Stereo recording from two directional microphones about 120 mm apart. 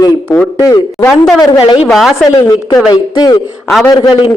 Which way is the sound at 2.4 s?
30° left (ahead or behind).